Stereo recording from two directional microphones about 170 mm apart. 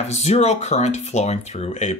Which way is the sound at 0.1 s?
40° left (ahead or behind).